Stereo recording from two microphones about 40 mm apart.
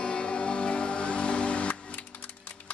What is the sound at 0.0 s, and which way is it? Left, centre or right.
Music, left.